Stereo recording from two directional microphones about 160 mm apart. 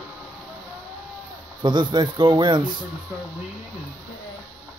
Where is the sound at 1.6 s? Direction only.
30° right (ahead or behind).